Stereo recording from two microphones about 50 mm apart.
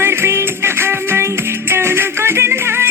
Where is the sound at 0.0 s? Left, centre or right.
Right.